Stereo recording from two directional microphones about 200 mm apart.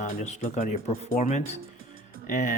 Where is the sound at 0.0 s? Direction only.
35° left (ahead or behind).